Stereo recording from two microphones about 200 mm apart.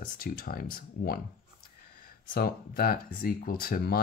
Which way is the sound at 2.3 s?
50° left (ahead or behind).